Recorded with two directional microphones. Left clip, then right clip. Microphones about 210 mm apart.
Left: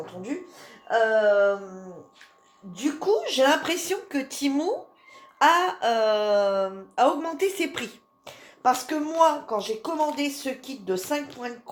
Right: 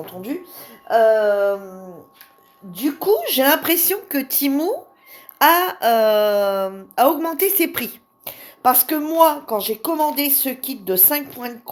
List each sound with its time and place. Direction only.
0.0 s speech: 50° right (ahead or behind)